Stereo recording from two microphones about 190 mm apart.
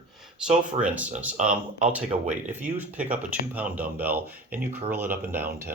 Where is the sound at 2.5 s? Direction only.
10° right (ahead or behind).